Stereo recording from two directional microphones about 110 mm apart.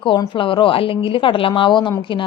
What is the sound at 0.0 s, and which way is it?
A woman's voice, 50° left (ahead or behind).